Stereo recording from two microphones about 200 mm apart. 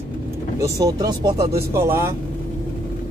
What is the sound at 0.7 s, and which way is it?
Speech, 20° right (ahead or behind).